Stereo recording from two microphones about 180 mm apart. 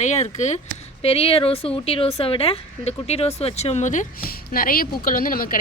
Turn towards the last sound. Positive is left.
turn(degrees=50)  # may be behind; listen again after turning